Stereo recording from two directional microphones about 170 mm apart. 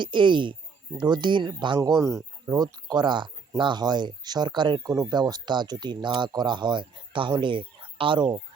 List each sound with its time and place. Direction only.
0.0 s speech: 30° right (ahead or behind)